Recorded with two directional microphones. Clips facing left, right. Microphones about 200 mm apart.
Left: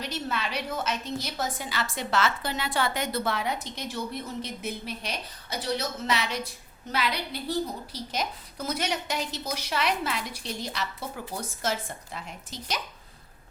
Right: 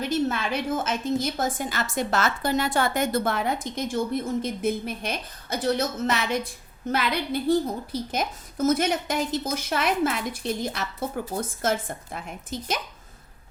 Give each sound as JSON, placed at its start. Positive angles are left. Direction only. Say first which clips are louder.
{"t": 0.0, "sound": "a woman's voice", "louder": "right 7 dB", "side_deg": -50}